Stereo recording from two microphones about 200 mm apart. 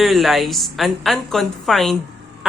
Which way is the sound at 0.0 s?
Centre (ahead or behind).